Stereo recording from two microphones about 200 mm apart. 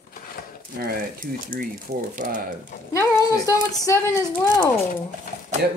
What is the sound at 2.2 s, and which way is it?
Speech, 40° right (ahead or behind).